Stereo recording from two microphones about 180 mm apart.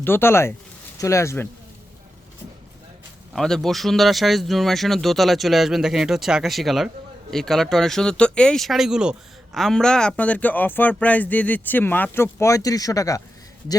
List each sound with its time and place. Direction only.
0.0 s speech: 10° left (ahead or behind)
3.3 s speech: centre (ahead or behind); by 13.2 s 20° left (ahead or behind)